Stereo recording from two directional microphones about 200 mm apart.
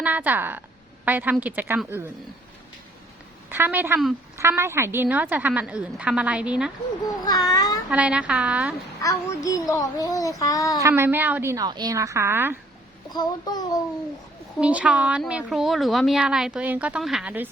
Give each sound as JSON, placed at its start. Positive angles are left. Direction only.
{"t": 0.0, "sound": "a woman's voice", "side_deg": -10}
{"t": 3.5, "sound": "a woman's voice", "side_deg": -10}
{"t": 7.3, "sound": "child singing", "side_deg": 20}
{"t": 7.9, "sound": "a woman's voice", "side_deg": -5}
{"t": 9.0, "sound": "a child's voice", "side_deg": 15}
{"t": 10.8, "sound": "a woman's voice", "side_deg": -10}
{"t": 13.1, "sound": "child singing", "side_deg": 20}
{"t": 14.6, "sound": "speech", "side_deg": -5}